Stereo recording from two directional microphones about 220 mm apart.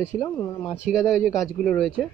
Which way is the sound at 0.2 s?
10° left (ahead or behind).